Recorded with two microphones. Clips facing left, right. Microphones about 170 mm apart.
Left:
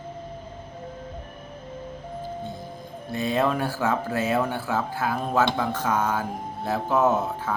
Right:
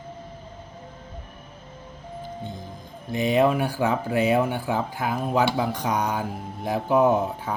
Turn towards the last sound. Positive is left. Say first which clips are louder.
# right 1 dB
turn(degrees=-10)  # may be behind; listen again after turning